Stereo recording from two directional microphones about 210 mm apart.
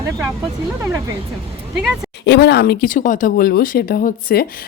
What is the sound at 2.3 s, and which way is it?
Speech, 50° left (ahead or behind).